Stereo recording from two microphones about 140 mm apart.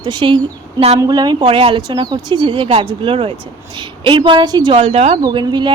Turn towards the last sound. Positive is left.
turn(degrees=-30)  # may be behind; listen again after turning